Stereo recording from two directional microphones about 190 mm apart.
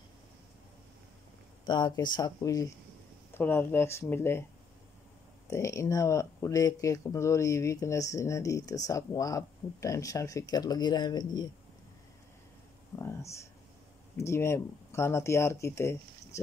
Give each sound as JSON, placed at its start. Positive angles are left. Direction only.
{"t": 1.7, "sound": "speech", "side_deg": 25}
{"t": 5.5, "sound": "speech", "side_deg": 15}
{"t": 13.0, "sound": "speech", "side_deg": 15}